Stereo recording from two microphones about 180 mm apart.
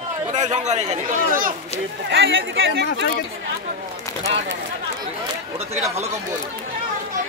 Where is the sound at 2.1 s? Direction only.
90° right.